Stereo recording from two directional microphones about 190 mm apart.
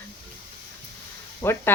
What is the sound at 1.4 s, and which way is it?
Speech, 15° left (ahead or behind).